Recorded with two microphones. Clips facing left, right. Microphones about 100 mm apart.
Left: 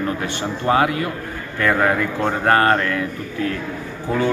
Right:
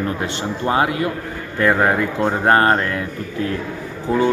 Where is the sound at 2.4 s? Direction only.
30° right (ahead or behind).